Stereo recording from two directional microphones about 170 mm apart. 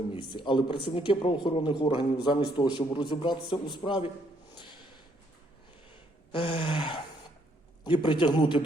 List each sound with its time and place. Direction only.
0.2 s a man's voice: 25° left (ahead or behind)
6.3 s a man's voice: 30° left (ahead or behind)